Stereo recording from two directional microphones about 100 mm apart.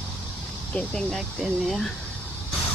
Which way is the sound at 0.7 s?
5° left (ahead or behind).